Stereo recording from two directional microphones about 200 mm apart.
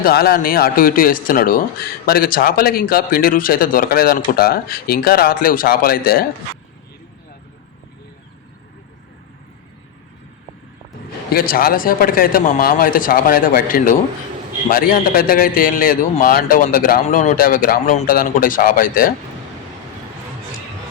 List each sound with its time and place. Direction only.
0.0 s a man's voice: 50° left (ahead or behind)
11.3 s a man's voice: 50° left (ahead or behind)